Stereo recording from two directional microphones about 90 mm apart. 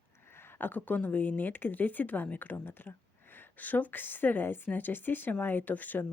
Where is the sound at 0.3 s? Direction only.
25° left (ahead or behind).